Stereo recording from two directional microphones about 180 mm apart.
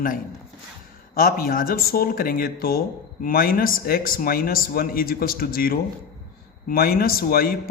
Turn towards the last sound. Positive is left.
turn(degrees=55)  # may be behind; listen again after turning